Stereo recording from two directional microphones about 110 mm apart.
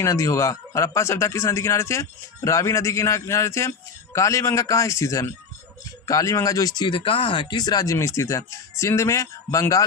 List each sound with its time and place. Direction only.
0.0 s speech: 25° left (ahead or behind)